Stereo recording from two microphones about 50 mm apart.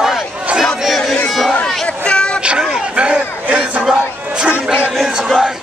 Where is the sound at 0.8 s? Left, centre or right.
Centre.